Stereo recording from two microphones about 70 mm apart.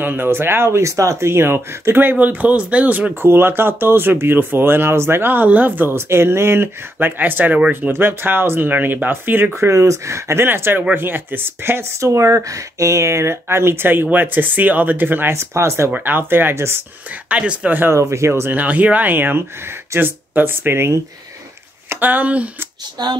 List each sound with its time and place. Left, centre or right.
0.0 s speech: right
3.2 s speech: right
9.7 s speech: right
17.3 s speech: centre
17.9 s speech: right
18.5 s speech: right
23.0 s speech: right